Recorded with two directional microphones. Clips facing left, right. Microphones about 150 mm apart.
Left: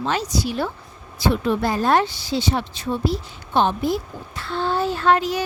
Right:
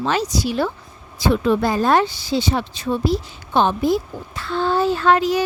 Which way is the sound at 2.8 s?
90° right.